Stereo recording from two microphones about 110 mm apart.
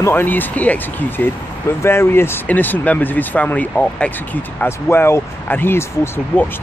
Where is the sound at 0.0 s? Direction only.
20° left (ahead or behind).